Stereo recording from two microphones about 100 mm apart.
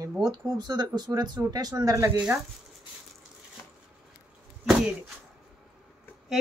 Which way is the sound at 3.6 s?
30° left (ahead or behind).